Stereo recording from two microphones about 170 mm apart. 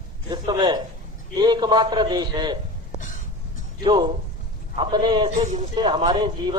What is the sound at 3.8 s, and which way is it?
A man's voice, 25° right (ahead or behind).